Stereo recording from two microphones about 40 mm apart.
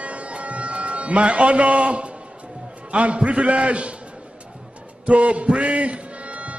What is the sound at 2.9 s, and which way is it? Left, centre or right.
A man's voice, right.